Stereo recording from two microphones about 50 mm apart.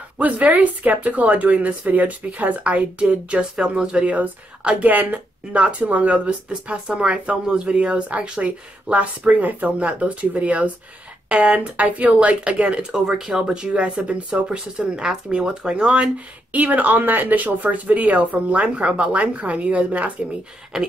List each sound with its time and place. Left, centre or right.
0.2 s speech: right
12.9 s speech: centre